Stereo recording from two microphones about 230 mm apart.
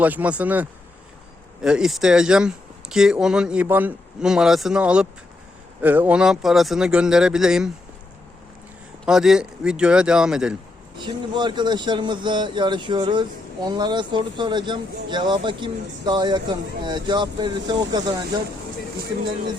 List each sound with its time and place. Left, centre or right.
0.0 s speech: centre
9.0 s speech: centre
11.0 s speech: centre